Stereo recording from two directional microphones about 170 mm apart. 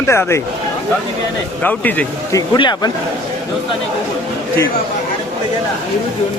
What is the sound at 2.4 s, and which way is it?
Speech, 25° left (ahead or behind).